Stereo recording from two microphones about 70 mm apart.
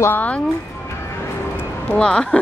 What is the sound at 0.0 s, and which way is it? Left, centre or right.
Speech, left.